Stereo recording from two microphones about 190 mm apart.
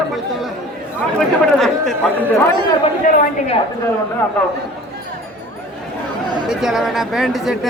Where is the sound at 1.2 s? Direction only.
Centre (ahead or behind).